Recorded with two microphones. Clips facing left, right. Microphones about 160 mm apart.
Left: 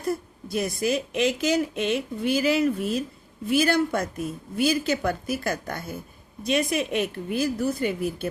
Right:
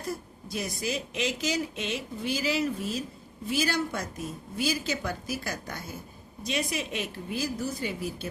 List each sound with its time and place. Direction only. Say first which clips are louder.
0.4 s a woman's voice: left 7 dB; 55° left (ahead or behind)